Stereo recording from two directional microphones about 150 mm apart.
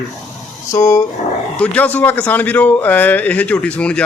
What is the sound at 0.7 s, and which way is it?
Speech, 20° left (ahead or behind).